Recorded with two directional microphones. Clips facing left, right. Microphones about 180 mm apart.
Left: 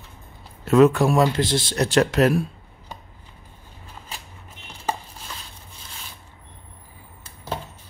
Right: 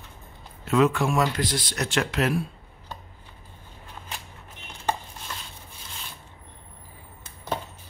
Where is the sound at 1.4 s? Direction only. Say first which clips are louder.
Left 6 dB; 25° left (ahead or behind); by 2.5 s 45° left (ahead or behind).